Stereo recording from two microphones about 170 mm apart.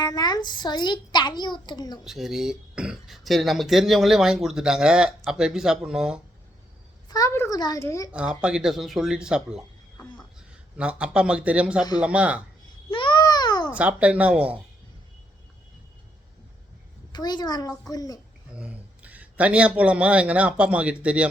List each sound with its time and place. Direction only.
0.0 s a child's voice: 25° left (ahead or behind)
2.0 s speech: centre (ahead or behind)
7.1 s a child's voice: 20° left (ahead or behind)
8.1 s speech: 5° right (ahead or behind)
10.8 s speech: 5° right (ahead or behind)
12.9 s babbling: 30° left (ahead or behind)
13.7 s speech: 10° right (ahead or behind)
17.1 s a child's voice: 25° left (ahead or behind)
18.5 s a man's voice: 5° right (ahead or behind)